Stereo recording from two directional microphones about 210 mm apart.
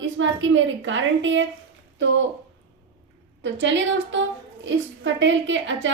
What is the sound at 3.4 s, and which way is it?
A woman's voice, 60° right (ahead or behind).